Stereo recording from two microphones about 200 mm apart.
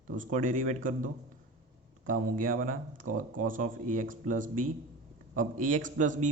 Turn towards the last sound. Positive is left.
turn(degrees=-40)  # may be behind; listen again after turning